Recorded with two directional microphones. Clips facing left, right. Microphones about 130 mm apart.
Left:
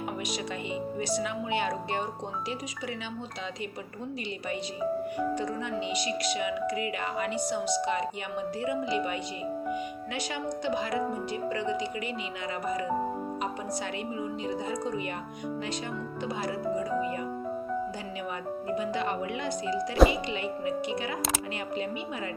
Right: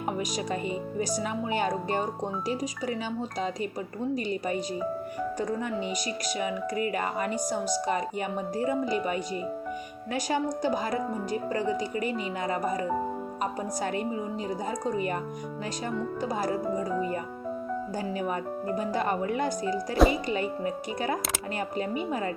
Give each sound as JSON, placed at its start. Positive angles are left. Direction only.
{"t": 0.9, "sound": "speech", "side_deg": -40}
{"t": 6.2, "sound": "speech", "side_deg": -45}
{"t": 10.2, "sound": "speech", "side_deg": -40}
{"t": 14.7, "sound": "speech", "side_deg": -40}
{"t": 16.3, "sound": "speech", "side_deg": -40}
{"t": 18.3, "sound": "speech", "side_deg": -40}